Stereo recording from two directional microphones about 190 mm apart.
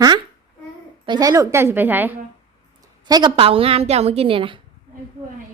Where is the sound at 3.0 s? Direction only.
20° right (ahead or behind).